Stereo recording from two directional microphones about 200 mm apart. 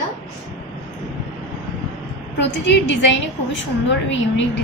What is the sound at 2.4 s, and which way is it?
A woman's voice, 65° left (ahead or behind).